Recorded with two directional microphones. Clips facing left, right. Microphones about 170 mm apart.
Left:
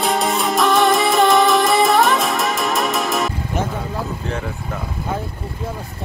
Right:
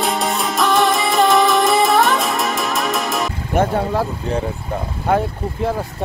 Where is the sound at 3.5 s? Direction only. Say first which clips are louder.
Right 6 dB; 55° right (ahead or behind).